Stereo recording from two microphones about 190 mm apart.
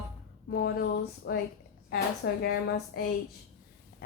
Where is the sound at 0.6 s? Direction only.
60° left (ahead or behind).